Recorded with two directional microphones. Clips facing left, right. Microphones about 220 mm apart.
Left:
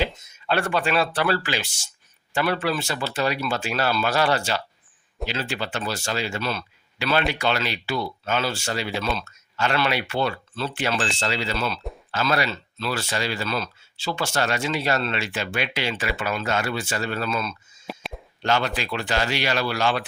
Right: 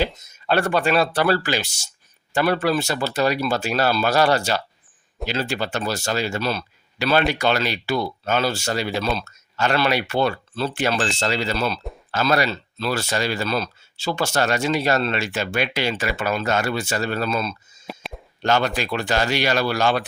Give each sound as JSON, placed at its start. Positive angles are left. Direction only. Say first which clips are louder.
{"t": 0.3, "sound": "speech", "louder": "right 4 dB", "side_deg": -40}
{"t": 17.8, "sound": "a sound", "louder": "even", "side_deg": 0}
{"t": 18.4, "sound": "speech", "louder": "right 3 dB", "side_deg": -45}